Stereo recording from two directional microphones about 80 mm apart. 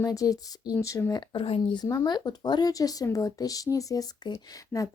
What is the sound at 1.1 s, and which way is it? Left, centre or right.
Speech, left.